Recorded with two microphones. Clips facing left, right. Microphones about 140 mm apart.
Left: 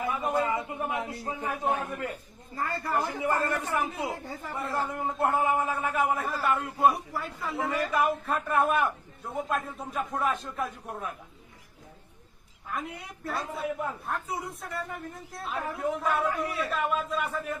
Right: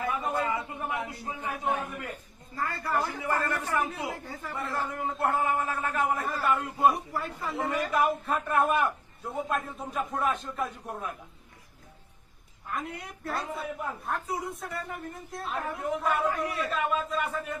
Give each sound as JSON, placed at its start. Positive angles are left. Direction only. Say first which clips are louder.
{"t": 0.4, "sound": "a man's voice", "louder": "left 2 dB", "side_deg": 20}
{"t": 1.2, "sound": "a man's voice", "louder": "left 2 dB", "side_deg": 35}
{"t": 2.8, "sound": "a man's voice", "louder": "left 1 dB", "side_deg": 15}
{"t": 12.6, "sound": "a man's voice", "louder": "even", "side_deg": 0}